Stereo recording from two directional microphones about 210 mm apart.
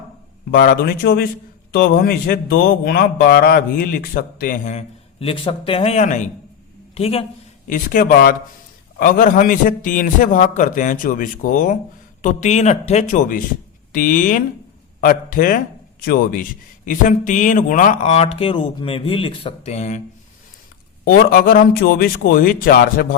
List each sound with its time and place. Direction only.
0.5 s a man's voice: 45° left (ahead or behind); by 7.3 s 30° left (ahead or behind)
7.7 s a man's voice: 40° left (ahead or behind)
21.0 s a man's voice: 45° left (ahead or behind)